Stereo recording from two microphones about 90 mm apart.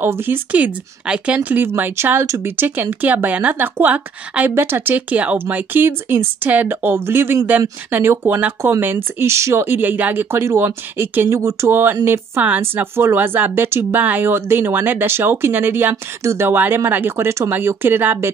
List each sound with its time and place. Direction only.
0.0 s speech: 25° right (ahead or behind)
11.3 s speech: 35° right (ahead or behind)